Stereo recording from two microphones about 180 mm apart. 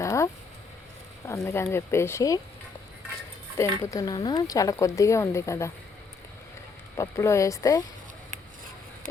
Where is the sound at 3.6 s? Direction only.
20° left (ahead or behind).